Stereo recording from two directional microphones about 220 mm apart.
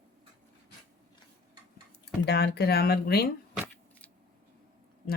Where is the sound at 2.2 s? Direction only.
50° left (ahead or behind).